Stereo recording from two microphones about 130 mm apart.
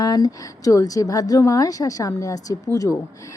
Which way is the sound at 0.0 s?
30° left (ahead or behind).